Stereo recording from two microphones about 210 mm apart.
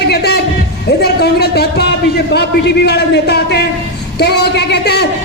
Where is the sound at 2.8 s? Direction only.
50° left (ahead or behind).